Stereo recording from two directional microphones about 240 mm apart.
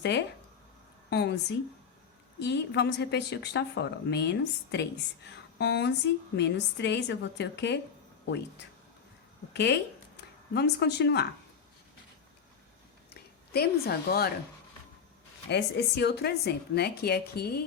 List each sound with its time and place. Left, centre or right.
0.0 s a woman's voice: left
9.5 s a woman's voice: left
13.5 s a woman's voice: left
15.4 s a woman's voice: left